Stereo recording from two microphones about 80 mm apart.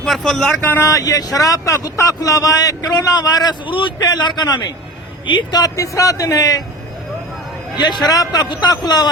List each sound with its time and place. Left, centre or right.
0.0 s speech: centre
0.6 s speech: left
0.9 s a man's voice: left
3.7 s a man's voice: left
4.0 s a man's voice: left
5.7 s speech: left
8.0 s a man's voice: left